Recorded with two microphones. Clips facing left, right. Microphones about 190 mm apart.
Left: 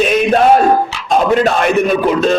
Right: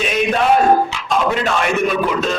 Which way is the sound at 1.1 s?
40° left (ahead or behind).